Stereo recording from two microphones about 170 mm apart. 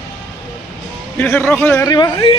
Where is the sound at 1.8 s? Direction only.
25° left (ahead or behind).